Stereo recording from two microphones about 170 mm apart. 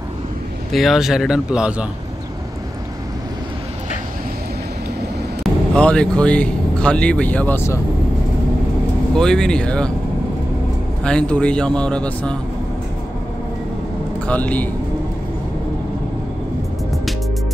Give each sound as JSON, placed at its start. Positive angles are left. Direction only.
{"t": 0.7, "sound": "speech", "side_deg": 0}
{"t": 5.4, "sound": "speech", "side_deg": 5}
{"t": 9.1, "sound": "speech", "side_deg": 5}
{"t": 11.1, "sound": "speech", "side_deg": 5}
{"t": 14.2, "sound": "a man's voice", "side_deg": 10}